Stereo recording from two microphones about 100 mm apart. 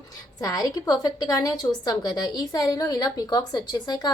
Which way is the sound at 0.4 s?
40° left (ahead or behind).